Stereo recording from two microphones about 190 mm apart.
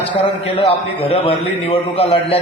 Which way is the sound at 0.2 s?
30° left (ahead or behind).